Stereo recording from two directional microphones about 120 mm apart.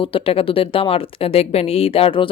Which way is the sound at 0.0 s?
50° left (ahead or behind).